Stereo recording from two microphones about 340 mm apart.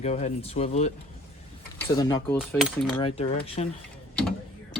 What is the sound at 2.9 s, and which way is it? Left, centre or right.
Speech, centre.